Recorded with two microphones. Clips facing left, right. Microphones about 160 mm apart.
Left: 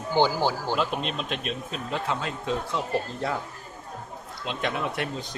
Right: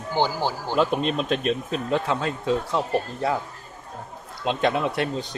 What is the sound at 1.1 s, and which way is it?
Speech, 40° right (ahead or behind).